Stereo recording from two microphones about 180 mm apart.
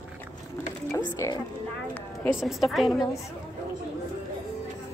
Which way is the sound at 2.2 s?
Centre (ahead or behind).